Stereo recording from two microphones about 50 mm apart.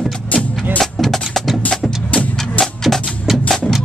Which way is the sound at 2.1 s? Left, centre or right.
Left.